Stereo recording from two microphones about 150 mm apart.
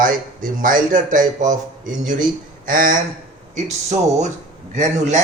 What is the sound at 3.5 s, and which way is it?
Speech, 50° right (ahead or behind).